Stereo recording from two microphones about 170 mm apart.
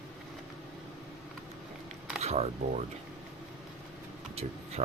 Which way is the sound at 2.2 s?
40° right (ahead or behind).